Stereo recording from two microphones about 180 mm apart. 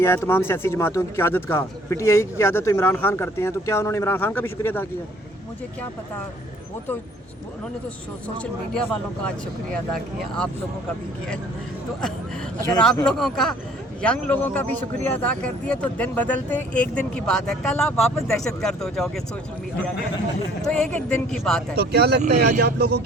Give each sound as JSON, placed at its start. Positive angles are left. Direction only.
{"t": 0.0, "sound": "speech", "side_deg": 15}
{"t": 8.7, "sound": "speech", "side_deg": 5}
{"t": 13.1, "sound": "speech", "side_deg": 0}
{"t": 20.7, "sound": "speech", "side_deg": 5}
{"t": 21.8, "sound": "speech", "side_deg": -65}